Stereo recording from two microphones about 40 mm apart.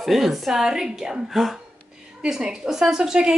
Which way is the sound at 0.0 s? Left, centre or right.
Centre.